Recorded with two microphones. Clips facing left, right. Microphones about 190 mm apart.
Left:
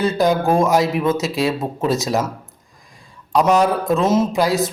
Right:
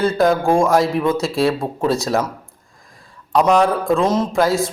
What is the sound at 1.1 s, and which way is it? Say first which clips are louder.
Speech: right 1 dB; 20° left (ahead or behind).